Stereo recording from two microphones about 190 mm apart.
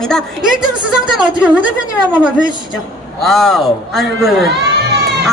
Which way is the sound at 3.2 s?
Centre (ahead or behind).